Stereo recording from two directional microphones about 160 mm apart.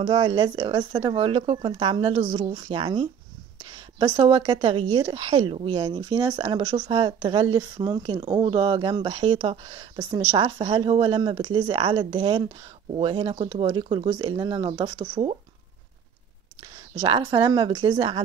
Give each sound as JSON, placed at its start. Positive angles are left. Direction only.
{"t": 0.0, "sound": "a woman's voice", "side_deg": -30}
{"t": 4.2, "sound": "a woman's voice", "side_deg": -35}
{"t": 17.0, "sound": "speech", "side_deg": -30}